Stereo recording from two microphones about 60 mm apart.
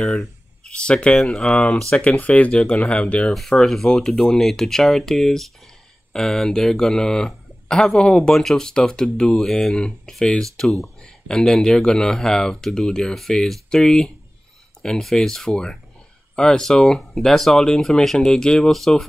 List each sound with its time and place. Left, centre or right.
0.0 s speech: centre
0.7 s speech: centre